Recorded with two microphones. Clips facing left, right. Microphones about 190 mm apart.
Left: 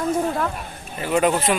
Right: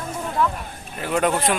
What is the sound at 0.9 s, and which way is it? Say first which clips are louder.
Speech: left 2 dB; centre (ahead or behind).